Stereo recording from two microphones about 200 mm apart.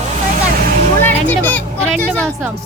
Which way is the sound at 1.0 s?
10° left (ahead or behind).